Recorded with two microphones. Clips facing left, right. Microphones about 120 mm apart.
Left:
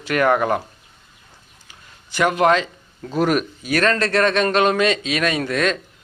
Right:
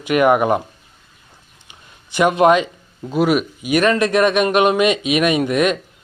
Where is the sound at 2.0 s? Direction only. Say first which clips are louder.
Right 3 dB; 20° right (ahead or behind).